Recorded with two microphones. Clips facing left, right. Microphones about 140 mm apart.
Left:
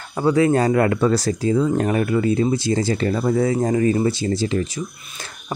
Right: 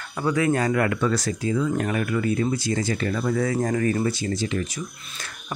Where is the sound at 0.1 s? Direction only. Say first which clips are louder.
Left 6 dB; 30° left (ahead or behind).